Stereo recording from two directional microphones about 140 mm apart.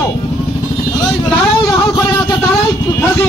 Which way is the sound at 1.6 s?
25° left (ahead or behind).